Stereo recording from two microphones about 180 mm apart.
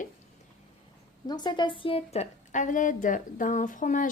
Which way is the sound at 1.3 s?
25° left (ahead or behind).